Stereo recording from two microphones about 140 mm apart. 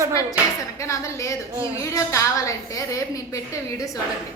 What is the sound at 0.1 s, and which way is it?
A woman's voice, 25° left (ahead or behind).